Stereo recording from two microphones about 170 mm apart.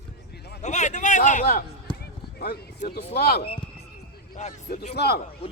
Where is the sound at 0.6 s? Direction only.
45° left (ahead or behind).